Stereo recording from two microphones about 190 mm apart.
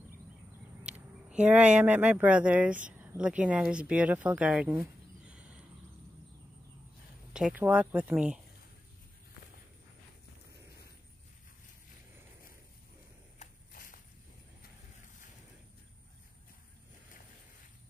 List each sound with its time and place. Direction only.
1.3 s speech: 5° right (ahead or behind)
7.3 s speech: 5° right (ahead or behind)
13.4 s a sound: 45° left (ahead or behind)